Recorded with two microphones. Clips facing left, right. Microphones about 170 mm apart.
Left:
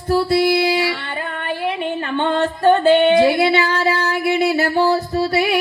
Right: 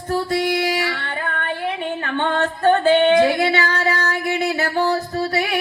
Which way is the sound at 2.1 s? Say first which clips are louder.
Left 2 dB; 15° left (ahead or behind).